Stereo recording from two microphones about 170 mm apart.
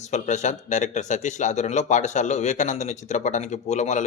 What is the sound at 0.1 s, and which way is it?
Speech, 45° left (ahead or behind).